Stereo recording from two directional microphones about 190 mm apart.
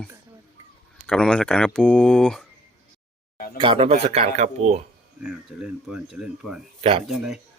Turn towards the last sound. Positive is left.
turn(degrees=0)  # may be behind; listen again after turning